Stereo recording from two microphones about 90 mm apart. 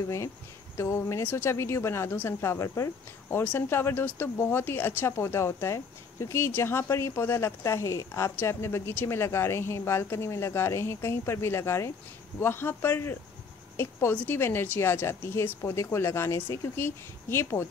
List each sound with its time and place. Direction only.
0.7 s a woman's voice: 30° left (ahead or behind)